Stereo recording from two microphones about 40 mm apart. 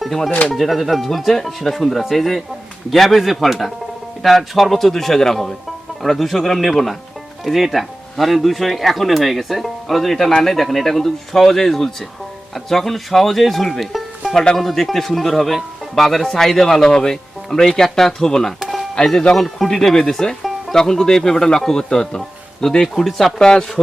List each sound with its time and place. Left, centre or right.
0.0 s speech: centre
0.3 s speech: left
0.5 s speech: centre
23.0 s speech: centre
23.4 s speech: centre